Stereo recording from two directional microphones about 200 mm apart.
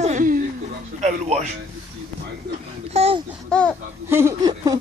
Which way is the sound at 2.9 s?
30° right (ahead or behind).